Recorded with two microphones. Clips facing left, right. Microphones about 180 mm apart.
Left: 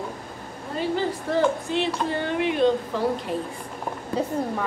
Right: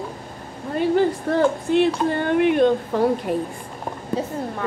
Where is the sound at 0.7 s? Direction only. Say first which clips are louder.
Right 7 dB; 55° right (ahead or behind).